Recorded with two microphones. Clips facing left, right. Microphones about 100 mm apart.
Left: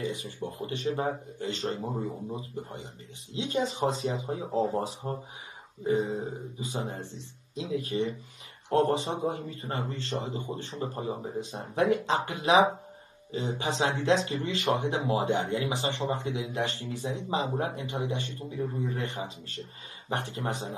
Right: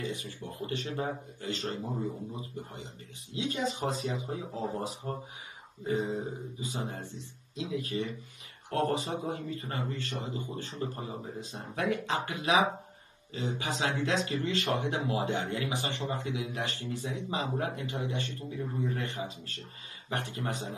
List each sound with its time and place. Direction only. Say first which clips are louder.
0.0 s a man's voice: left 4 dB; 20° left (ahead or behind)